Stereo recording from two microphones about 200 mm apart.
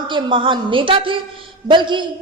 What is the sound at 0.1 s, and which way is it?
A woman's voice, 25° right (ahead or behind).